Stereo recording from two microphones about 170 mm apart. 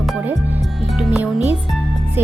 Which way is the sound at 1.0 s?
5° right (ahead or behind).